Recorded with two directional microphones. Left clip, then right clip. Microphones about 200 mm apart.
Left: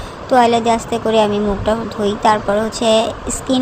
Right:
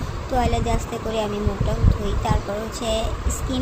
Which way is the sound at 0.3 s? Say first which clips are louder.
Left 11 dB; 25° left (ahead or behind).